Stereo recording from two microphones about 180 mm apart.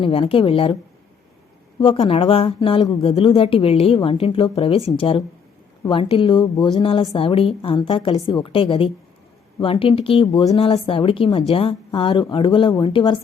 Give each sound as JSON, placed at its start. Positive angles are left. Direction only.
{"t": 0.0, "sound": "speech", "side_deg": 30}
{"t": 1.8, "sound": "speech", "side_deg": 30}